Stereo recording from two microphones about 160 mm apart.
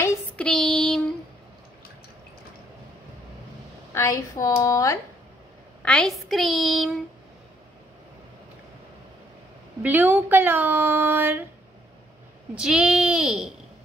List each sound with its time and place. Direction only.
0.4 s a woman's voice: 5° left (ahead or behind)
3.9 s a woman's voice: 20° left (ahead or behind)
5.8 s a woman's voice: 5° left (ahead or behind)
9.8 s speech: 10° right (ahead or behind)
12.5 s a woman's voice: 5° right (ahead or behind)